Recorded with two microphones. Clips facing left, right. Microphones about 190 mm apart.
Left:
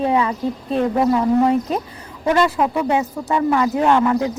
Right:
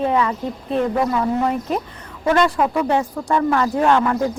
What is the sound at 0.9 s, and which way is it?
Speech, 25° left (ahead or behind).